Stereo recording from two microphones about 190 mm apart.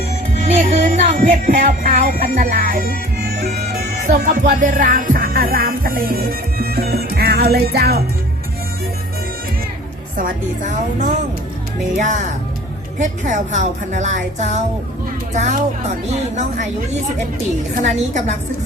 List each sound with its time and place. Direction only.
0.6 s music: 45° right (ahead or behind)
4.2 s music: 45° right (ahead or behind)
10.2 s speech: 45° right (ahead or behind)
17.7 s speech: 40° right (ahead or behind)